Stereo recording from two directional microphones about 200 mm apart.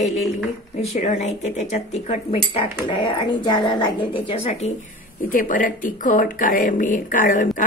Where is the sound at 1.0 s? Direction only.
35° left (ahead or behind).